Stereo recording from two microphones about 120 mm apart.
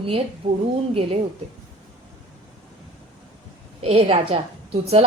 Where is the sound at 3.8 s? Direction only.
55° right (ahead or behind).